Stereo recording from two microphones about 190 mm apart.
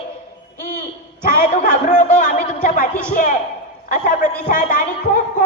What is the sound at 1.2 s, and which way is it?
A man's voice, 40° left (ahead or behind).